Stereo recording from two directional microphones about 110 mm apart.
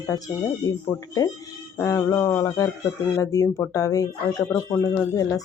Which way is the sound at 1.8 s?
25° left (ahead or behind).